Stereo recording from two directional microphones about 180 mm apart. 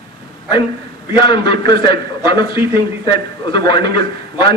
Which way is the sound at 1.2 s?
25° left (ahead or behind).